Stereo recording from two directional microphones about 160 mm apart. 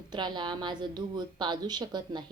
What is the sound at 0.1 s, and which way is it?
Speech, 30° right (ahead or behind).